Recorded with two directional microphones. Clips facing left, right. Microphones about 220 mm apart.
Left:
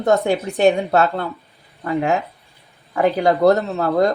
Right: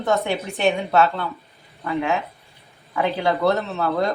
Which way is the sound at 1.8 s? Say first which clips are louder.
Left 4 dB; 40° left (ahead or behind).